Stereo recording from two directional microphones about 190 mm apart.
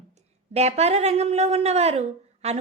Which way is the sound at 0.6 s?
35° right (ahead or behind).